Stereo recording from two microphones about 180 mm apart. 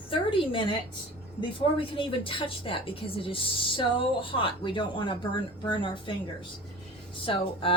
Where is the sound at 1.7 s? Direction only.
30° left (ahead or behind).